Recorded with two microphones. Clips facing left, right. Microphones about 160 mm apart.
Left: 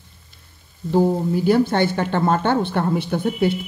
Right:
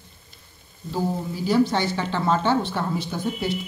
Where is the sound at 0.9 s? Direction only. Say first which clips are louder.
Left 9 dB; 55° left (ahead or behind).